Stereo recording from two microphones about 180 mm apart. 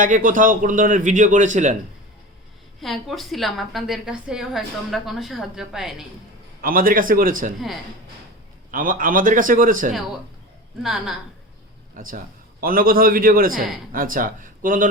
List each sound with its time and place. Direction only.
0.0 s a man's voice: 45° right (ahead or behind)
2.8 s a woman's voice: centre (ahead or behind)
6.6 s a man's voice: 50° right (ahead or behind)
8.7 s a man's voice: 50° right (ahead or behind)
10.8 s a woman's voice: centre (ahead or behind)
11.9 s a man's voice: 50° right (ahead or behind)